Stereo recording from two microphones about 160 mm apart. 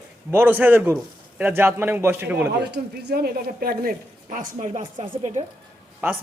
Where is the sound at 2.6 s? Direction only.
90° right; by 3.9 s 65° right (ahead or behind).